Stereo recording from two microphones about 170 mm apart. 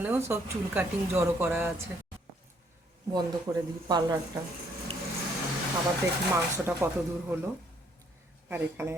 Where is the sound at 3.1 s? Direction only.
25° right (ahead or behind).